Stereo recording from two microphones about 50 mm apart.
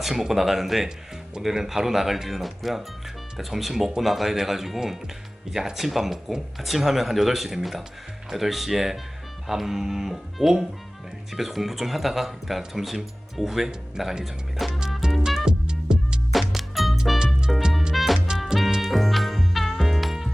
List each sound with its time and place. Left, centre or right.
0.0 s speech: centre
14.8 s music: centre
15.4 s music: centre
16.3 s music: centre
17.2 s music: centre
17.9 s music: centre
18.3 s music: centre
18.8 s music: centre